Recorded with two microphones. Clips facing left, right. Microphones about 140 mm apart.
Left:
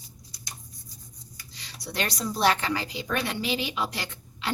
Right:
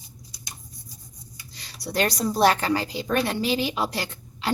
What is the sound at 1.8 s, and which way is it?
A woman's voice, 40° right (ahead or behind).